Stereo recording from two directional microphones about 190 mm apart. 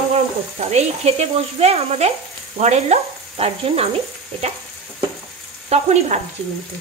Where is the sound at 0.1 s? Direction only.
35° right (ahead or behind).